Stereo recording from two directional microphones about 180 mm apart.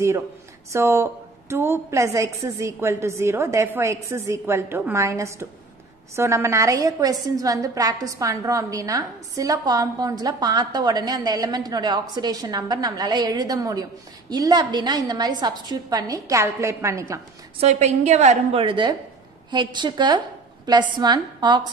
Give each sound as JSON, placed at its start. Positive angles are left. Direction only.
{"t": 0.7, "sound": "a woman's voice", "side_deg": -15}
{"t": 17.6, "sound": "a woman's voice", "side_deg": -40}